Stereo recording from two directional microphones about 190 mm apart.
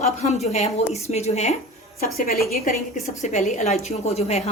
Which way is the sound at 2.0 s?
50° left (ahead or behind).